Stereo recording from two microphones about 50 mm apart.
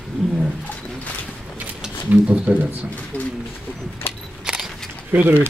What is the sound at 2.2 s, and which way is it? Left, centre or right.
Speech, right.